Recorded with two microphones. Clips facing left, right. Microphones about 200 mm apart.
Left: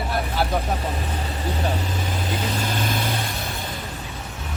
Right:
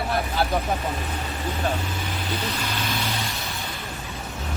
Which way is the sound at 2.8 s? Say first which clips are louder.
Left 3 dB; 50° left (ahead or behind).